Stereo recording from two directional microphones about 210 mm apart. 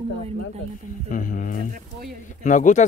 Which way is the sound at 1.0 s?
40° left (ahead or behind).